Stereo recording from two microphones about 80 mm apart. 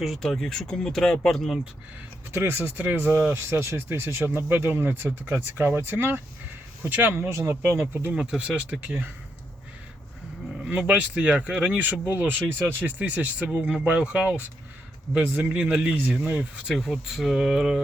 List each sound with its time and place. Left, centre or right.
0.0 s speech: centre
2.3 s speech: right
5.6 s speech: right
8.1 s speech: centre
10.6 s speech: centre